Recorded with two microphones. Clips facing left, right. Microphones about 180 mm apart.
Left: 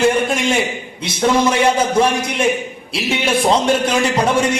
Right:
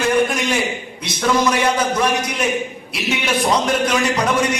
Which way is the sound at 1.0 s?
25° left (ahead or behind).